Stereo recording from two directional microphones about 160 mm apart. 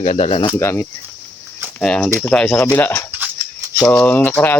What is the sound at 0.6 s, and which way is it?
Speech, 15° left (ahead or behind).